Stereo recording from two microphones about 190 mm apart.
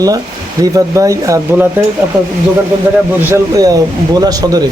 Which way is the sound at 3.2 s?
15° right (ahead or behind).